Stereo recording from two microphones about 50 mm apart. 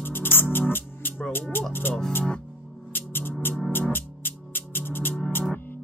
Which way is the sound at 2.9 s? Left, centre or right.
Left.